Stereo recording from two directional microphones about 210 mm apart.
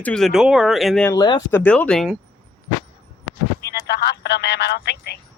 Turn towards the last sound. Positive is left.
turn(degrees=50)  # may be behind; listen again after turning